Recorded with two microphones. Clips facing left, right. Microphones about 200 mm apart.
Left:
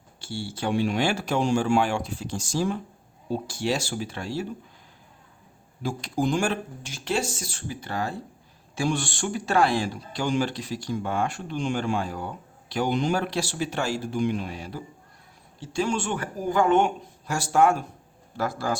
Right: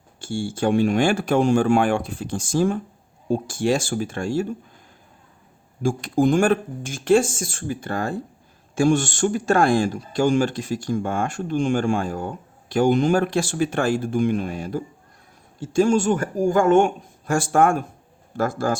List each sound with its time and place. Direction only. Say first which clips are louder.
0.2 s speech: right 7 dB; 50° right (ahead or behind)
5.8 s speech: right 7 dB; 50° right (ahead or behind)